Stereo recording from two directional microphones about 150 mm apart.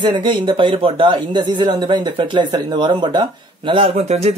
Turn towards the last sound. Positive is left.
turn(degrees=-45)  # may be behind; listen again after turning